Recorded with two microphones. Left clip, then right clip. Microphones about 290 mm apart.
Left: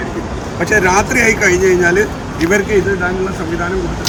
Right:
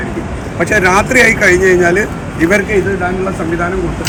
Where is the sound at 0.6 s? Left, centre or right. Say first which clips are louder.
Right 2 dB; centre.